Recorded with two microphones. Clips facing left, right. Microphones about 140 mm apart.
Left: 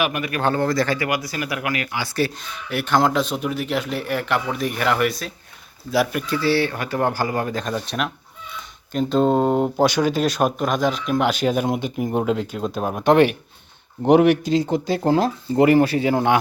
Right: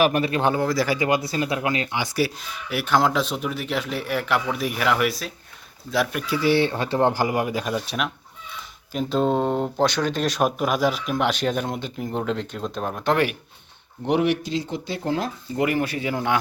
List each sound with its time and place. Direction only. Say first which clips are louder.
0.0 s a man's voice: right 2 dB; 35° right (ahead or behind)
0.5 s speech: left 2 dB; 5° right (ahead or behind)
0.9 s speech: right 2 dB; 25° right (ahead or behind); by 13.3 s 20° left (ahead or behind)
14.0 s speech: left 7 dB; 45° left (ahead or behind)